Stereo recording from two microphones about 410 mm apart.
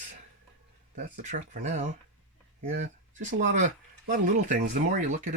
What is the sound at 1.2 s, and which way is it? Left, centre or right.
Speech, centre.